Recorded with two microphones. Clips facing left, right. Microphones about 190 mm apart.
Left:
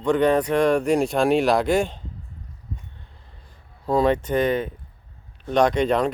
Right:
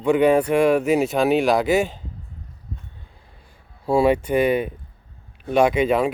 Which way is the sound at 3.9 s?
10° right (ahead or behind).